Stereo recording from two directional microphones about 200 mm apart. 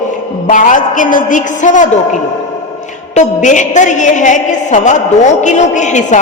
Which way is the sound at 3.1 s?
40° left (ahead or behind).